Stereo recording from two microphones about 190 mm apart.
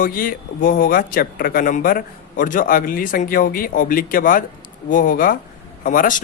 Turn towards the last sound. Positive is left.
turn(degrees=45)  # may be behind; listen again after turning